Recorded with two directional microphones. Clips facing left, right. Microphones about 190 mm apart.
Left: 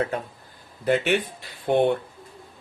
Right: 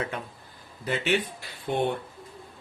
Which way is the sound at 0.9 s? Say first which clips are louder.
Left 5 dB; 55° left (ahead or behind).